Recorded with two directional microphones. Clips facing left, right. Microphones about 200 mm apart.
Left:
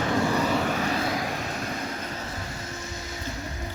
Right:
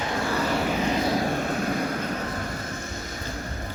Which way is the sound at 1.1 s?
45° right (ahead or behind).